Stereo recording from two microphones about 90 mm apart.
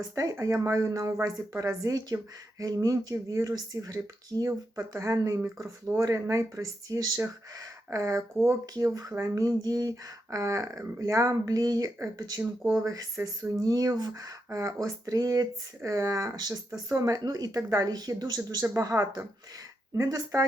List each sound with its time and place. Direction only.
0.2 s speech: 40° right (ahead or behind)
8.6 s speech: 45° right (ahead or behind)